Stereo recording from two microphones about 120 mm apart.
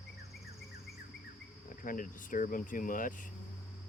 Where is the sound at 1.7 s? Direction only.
90° left.